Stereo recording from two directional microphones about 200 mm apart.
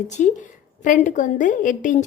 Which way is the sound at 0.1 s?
35° left (ahead or behind).